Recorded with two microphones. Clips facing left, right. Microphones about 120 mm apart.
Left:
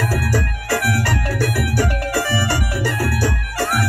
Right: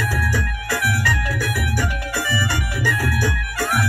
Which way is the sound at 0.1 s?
35° left (ahead or behind).